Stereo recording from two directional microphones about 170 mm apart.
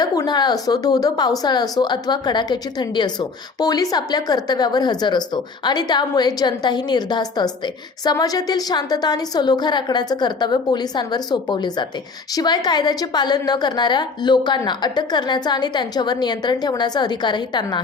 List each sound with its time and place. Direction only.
0.0 s a woman's voice: 20° left (ahead or behind)